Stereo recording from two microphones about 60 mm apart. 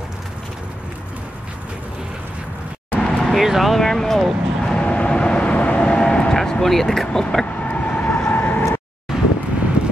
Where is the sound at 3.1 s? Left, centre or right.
Centre.